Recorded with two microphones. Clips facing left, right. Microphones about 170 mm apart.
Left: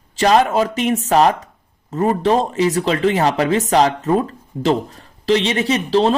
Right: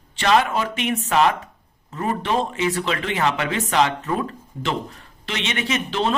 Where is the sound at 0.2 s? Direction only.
40° left (ahead or behind).